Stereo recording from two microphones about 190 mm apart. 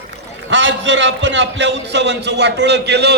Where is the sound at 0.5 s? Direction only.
75° right (ahead or behind).